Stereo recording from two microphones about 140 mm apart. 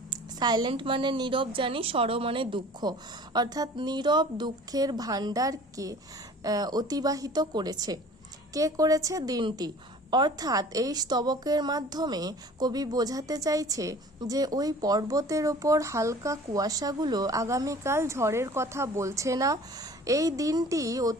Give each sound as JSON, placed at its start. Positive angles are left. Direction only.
{"t": 0.1, "sound": "a woman's voice", "side_deg": -30}